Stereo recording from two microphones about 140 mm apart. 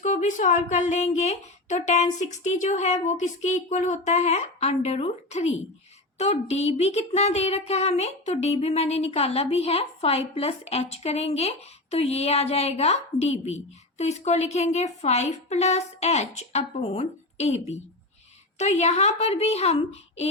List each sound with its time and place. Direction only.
0.0 s a woman's voice: 60° left (ahead or behind)